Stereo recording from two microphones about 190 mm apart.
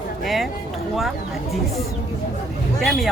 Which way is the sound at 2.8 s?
Centre (ahead or behind).